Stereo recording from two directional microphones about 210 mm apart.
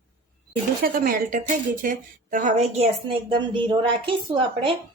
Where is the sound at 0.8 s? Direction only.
45° right (ahead or behind).